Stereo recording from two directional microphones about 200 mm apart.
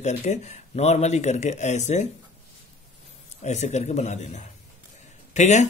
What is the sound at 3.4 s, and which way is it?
A man's voice, 35° left (ahead or behind).